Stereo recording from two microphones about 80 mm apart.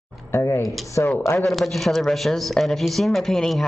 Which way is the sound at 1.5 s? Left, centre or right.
Centre.